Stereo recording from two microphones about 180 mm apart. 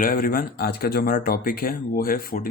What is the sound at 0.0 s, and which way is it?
Speech, 50° left (ahead or behind).